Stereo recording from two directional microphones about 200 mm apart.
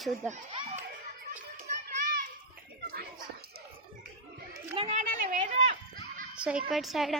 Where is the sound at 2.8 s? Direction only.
50° right (ahead or behind).